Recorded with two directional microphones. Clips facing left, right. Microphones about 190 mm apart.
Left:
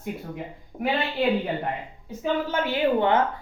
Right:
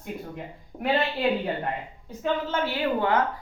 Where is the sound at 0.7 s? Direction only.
10° left (ahead or behind).